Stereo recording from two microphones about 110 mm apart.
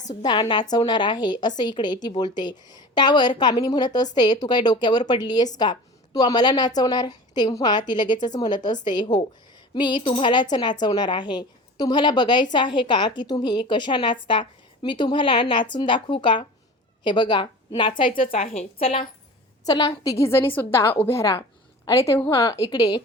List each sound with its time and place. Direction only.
0.1 s a woman's voice: 40° left (ahead or behind)
18.3 s a woman's voice: 65° left (ahead or behind)
19.6 s a woman's voice: 35° left (ahead or behind)
20.1 s a woman's voice: 25° left (ahead or behind)